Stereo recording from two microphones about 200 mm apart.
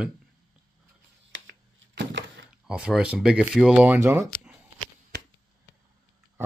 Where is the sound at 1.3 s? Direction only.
70° right (ahead or behind).